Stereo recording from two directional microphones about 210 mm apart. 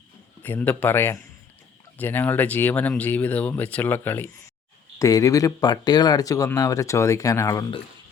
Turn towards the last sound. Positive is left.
turn(degrees=15)  # may be behind; listen again after turning